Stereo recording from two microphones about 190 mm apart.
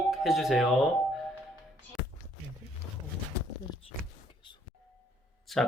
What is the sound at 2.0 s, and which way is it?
Music, 60° left (ahead or behind).